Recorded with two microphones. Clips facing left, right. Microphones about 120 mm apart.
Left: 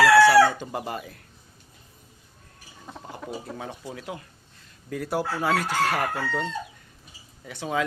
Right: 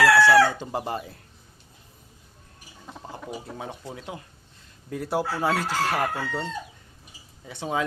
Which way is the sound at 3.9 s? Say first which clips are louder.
Left 1 dB; 25° right (ahead or behind).